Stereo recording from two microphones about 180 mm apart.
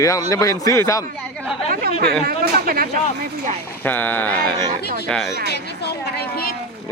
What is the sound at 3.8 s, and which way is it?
Speech, 10° left (ahead or behind).